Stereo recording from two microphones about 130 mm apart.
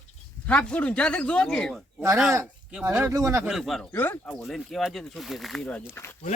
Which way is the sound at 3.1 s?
25° right (ahead or behind).